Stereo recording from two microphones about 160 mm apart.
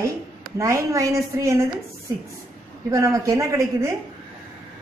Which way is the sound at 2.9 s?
20° right (ahead or behind).